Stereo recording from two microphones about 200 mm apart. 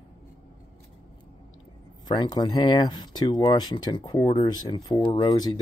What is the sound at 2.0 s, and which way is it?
Speech, 20° left (ahead or behind).